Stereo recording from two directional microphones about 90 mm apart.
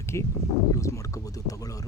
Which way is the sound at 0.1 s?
35° left (ahead or behind).